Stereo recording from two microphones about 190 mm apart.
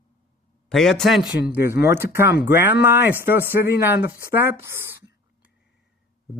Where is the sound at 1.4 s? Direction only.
10° right (ahead or behind).